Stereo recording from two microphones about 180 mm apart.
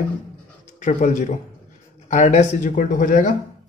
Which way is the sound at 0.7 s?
45° left (ahead or behind).